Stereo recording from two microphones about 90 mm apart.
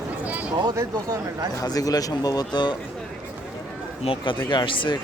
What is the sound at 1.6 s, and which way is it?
Speech, 45° left (ahead or behind).